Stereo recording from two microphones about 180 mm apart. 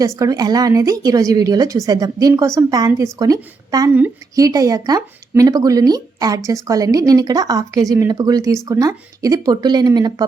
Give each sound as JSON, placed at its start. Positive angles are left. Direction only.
{"t": 0.0, "sound": "a woman's voice", "side_deg": -20}